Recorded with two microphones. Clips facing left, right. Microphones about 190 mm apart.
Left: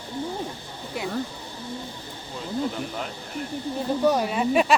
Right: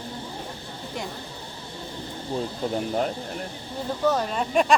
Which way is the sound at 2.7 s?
40° right (ahead or behind).